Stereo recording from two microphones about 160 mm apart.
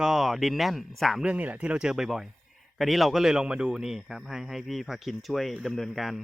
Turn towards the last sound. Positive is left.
turn(degrees=0)  # may be behind; listen again after turning